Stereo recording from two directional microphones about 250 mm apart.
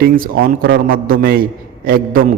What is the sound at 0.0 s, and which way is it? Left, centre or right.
A man's voice, right.